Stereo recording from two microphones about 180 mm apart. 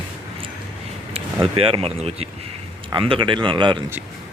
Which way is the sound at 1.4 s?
30° right (ahead or behind).